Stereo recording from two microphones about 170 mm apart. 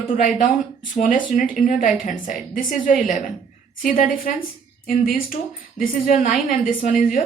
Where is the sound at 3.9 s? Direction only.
50° left (ahead or behind).